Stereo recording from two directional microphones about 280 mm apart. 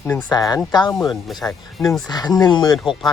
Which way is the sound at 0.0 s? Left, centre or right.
Centre.